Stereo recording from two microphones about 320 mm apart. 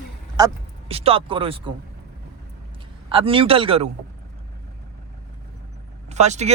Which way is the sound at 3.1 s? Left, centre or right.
Centre.